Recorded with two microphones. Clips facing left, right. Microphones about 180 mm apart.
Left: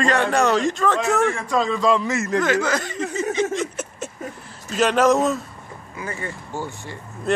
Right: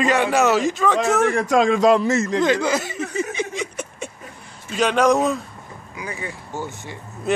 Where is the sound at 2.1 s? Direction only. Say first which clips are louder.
Right 2 dB; 30° right (ahead or behind); by 3.2 s 10° right (ahead or behind).